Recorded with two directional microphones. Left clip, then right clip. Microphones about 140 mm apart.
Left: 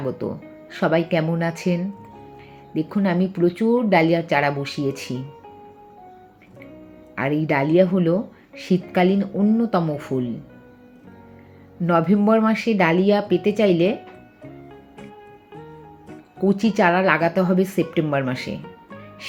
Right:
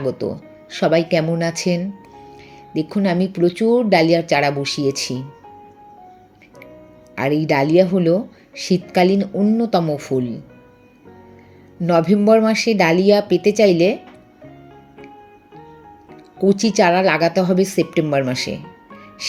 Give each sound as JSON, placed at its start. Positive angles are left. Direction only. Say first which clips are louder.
{"t": 0.0, "sound": "speech", "louder": "right 4 dB", "side_deg": -25}
{"t": 7.2, "sound": "speech", "louder": "right 4 dB", "side_deg": -40}
{"t": 11.8, "sound": "speech", "louder": "right 3 dB", "side_deg": -30}
{"t": 16.4, "sound": "speech", "louder": "right 4 dB", "side_deg": -30}